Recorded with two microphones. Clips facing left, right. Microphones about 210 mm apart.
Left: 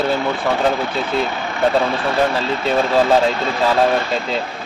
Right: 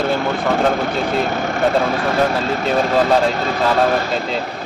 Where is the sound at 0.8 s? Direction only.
45° right (ahead or behind).